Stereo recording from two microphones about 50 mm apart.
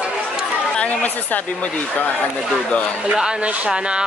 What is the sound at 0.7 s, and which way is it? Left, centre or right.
Speech, left.